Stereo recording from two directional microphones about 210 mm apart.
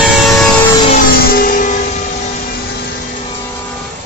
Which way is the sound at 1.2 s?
45° left (ahead or behind).